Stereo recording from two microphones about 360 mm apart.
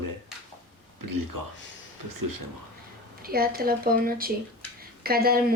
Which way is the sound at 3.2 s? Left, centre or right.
Right.